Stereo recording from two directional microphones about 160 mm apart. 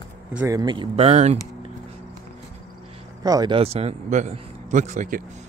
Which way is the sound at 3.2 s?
25° right (ahead or behind).